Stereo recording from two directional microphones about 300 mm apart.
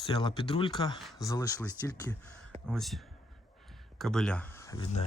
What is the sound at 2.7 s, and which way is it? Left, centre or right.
Speech, centre.